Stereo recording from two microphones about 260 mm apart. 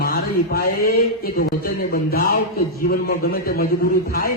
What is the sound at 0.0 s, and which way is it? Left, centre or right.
Speech, left.